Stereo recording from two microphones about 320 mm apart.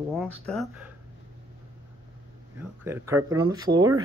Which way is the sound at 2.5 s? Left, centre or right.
Centre.